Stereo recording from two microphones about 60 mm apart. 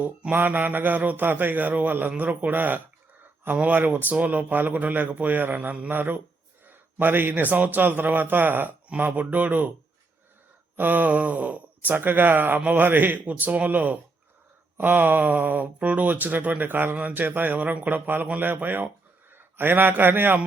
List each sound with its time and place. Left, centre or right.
0.0 s speech: right
5.9 s speech: right
10.8 s a man's voice: right